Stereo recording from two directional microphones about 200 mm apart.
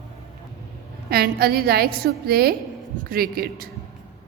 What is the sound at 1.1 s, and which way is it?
A woman's voice, 50° right (ahead or behind).